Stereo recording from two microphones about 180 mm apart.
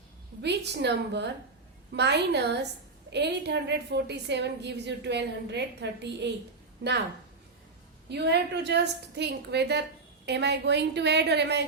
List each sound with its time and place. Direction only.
0.4 s a woman's voice: 70° right (ahead or behind)
8.1 s a woman's voice: 70° right (ahead or behind)